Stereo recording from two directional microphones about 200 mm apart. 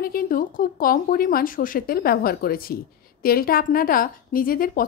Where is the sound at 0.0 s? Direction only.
45° left (ahead or behind).